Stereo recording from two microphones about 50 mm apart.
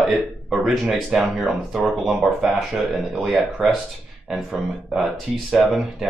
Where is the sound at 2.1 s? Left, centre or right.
Centre.